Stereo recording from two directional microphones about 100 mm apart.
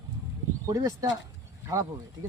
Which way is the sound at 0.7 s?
40° right (ahead or behind).